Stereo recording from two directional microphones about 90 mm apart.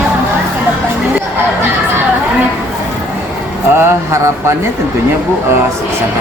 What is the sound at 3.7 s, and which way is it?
Speech, 30° right (ahead or behind).